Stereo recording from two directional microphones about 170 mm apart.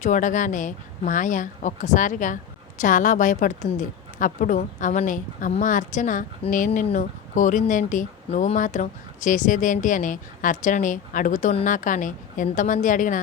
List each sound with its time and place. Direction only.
0.0 s speech: 50° left (ahead or behind)